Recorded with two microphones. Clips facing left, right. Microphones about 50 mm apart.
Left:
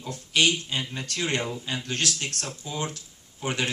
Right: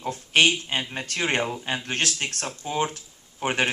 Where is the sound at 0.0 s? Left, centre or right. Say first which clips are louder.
Right 3 dB; right.